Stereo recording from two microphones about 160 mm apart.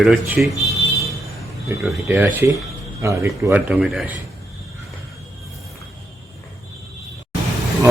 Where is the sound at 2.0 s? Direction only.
10° right (ahead or behind).